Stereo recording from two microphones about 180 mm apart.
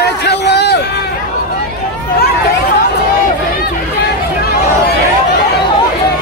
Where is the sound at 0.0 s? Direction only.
65° left (ahead or behind).